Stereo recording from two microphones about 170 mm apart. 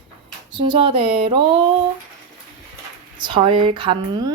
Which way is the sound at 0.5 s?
30° right (ahead or behind).